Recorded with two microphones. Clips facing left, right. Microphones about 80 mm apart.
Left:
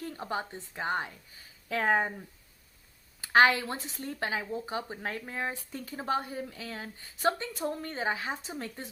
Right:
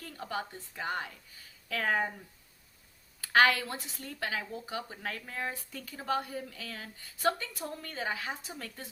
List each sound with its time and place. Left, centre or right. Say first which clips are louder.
0.0 s speech: left 3 dB; left
3.2 s speech: left 2 dB; left